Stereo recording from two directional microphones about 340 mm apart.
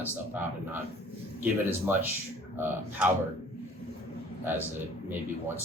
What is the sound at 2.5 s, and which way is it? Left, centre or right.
Speech, centre.